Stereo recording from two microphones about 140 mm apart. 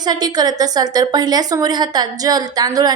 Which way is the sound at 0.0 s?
30° right (ahead or behind).